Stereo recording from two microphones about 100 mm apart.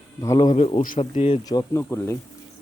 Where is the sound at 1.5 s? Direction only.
30° left (ahead or behind).